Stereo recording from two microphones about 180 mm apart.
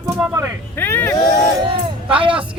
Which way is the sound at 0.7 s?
10° left (ahead or behind).